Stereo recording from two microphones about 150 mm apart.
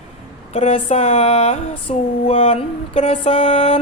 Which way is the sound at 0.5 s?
45° left (ahead or behind).